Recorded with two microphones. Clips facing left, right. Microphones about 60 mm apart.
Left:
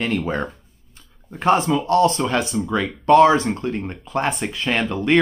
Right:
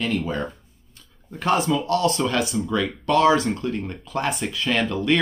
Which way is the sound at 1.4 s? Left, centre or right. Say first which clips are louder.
Left 3 dB; left.